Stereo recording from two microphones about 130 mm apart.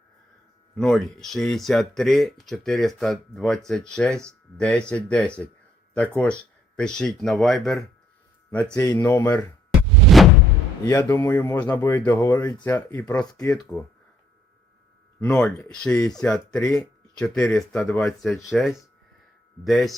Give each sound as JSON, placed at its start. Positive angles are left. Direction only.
{"t": 0.8, "sound": "speech", "side_deg": 5}
{"t": 8.9, "sound": "speech", "side_deg": 30}
{"t": 9.1, "sound": "speech", "side_deg": 15}
{"t": 10.0, "sound": "a sound", "side_deg": 0}
{"t": 10.8, "sound": "speech", "side_deg": 25}
{"t": 15.2, "sound": "speech", "side_deg": 10}